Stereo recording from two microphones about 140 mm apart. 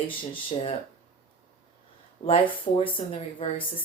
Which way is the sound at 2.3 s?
40° left (ahead or behind).